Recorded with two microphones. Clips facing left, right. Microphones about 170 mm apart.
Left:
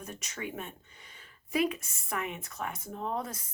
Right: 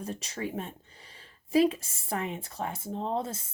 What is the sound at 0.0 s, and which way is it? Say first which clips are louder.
Speech: right 5 dB; 30° right (ahead or behind).